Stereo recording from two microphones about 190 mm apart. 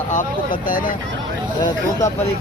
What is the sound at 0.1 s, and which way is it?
Speech, 45° left (ahead or behind).